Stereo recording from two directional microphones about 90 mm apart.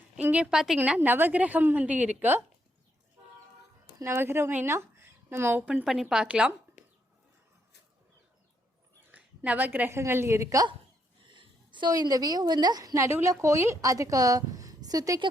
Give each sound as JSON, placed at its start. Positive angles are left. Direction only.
{"t": 0.2, "sound": "a woman's voice", "side_deg": -20}
{"t": 0.5, "sound": "a woman's voice", "side_deg": -5}
{"t": 0.9, "sound": "a woman's voice", "side_deg": -20}
{"t": 4.0, "sound": "speech", "side_deg": -25}
{"t": 5.8, "sound": "a woman's voice", "side_deg": -5}
{"t": 9.1, "sound": "a sound", "side_deg": -15}
{"t": 9.9, "sound": "a woman's voice", "side_deg": -30}
{"t": 11.2, "sound": "a sound", "side_deg": -65}
{"t": 11.9, "sound": "a woman's voice", "side_deg": -45}
{"t": 13.1, "sound": "a woman's voice", "side_deg": -25}